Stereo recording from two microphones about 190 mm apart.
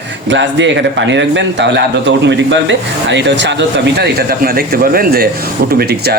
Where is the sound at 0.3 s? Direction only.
70° right (ahead or behind).